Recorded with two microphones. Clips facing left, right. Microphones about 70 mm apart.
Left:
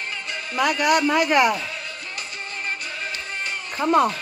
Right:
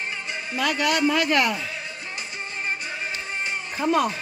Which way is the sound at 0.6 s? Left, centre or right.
Centre.